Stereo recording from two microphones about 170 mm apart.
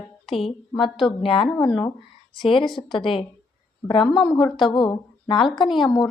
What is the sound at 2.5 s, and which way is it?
A woman's voice, 30° left (ahead or behind).